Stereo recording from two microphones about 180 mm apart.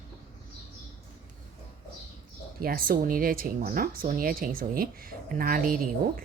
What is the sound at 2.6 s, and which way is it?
Speech, 55° right (ahead or behind).